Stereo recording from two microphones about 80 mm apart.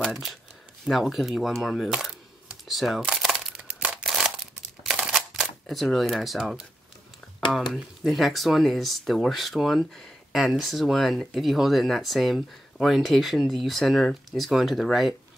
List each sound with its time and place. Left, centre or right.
0.0 s a sound: centre
0.8 s speech: centre
3.2 s crumpling: centre
4.8 s camera: centre
7.5 s speech: centre